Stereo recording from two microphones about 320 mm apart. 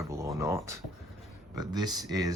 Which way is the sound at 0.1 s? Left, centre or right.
Centre.